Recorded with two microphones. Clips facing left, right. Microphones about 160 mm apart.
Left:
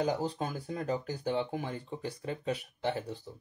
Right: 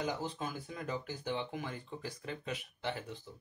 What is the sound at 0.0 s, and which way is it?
Speech, 40° left (ahead or behind).